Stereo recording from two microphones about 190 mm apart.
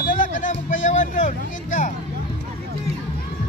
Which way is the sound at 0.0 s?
45° left (ahead or behind).